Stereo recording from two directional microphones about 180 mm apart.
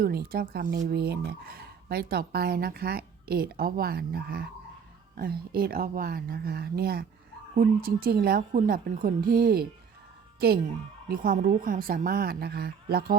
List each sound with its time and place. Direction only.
0.0 s speech: 60° right (ahead or behind)
11.1 s a woman's voice: 55° right (ahead or behind)